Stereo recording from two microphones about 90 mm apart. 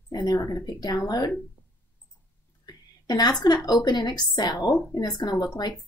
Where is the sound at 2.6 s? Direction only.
50° left (ahead or behind).